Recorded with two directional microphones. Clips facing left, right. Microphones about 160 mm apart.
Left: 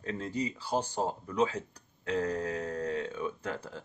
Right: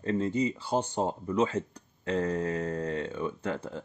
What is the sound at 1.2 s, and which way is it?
Speech, centre (ahead or behind).